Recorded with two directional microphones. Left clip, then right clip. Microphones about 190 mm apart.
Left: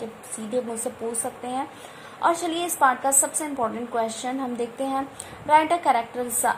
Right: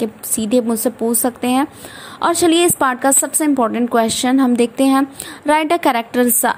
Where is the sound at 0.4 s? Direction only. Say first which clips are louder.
Right 11 dB; 40° right (ahead or behind).